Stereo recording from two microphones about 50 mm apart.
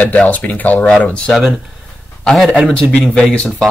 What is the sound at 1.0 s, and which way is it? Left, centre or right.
Speech, left.